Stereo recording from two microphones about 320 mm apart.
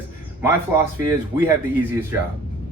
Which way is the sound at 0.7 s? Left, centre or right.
Centre.